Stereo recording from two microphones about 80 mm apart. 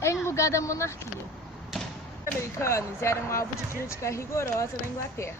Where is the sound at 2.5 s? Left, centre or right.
Left.